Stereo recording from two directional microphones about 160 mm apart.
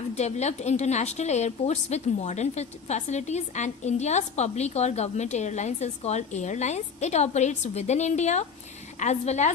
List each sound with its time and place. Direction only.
0.2 s a woman's voice: 45° left (ahead or behind)